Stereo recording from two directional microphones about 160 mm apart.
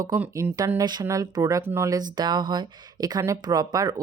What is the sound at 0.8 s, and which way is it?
A woman's voice, 25° right (ahead or behind).